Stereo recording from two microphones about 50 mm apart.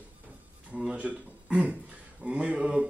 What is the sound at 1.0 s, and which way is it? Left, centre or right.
A man's voice, right.